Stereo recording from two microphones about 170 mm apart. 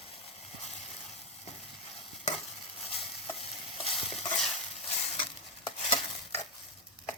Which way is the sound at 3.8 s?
35° left (ahead or behind).